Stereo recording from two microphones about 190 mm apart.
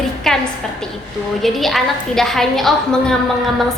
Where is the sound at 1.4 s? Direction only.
Centre (ahead or behind).